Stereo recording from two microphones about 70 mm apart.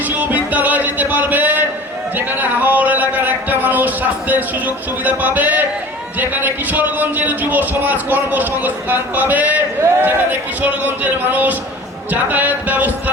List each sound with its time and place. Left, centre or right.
0.1 s music: right
2.1 s speech: right